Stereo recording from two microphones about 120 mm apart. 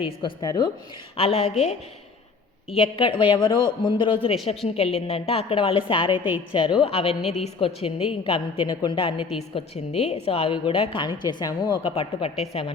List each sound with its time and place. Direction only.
0.2 s a woman's voice: 40° left (ahead or behind)
1.1 s a woman's voice: 55° left (ahead or behind)
4.8 s a woman's voice: 60° left (ahead or behind)
8.6 s a woman's voice: 35° left (ahead or behind)
9.7 s a woman's voice: 60° left (ahead or behind); by 11.8 s 35° left (ahead or behind)
11.8 s a woman's voice: 50° left (ahead or behind)